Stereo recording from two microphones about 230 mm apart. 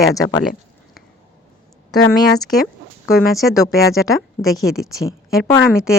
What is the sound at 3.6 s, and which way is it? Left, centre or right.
A woman's voice, centre.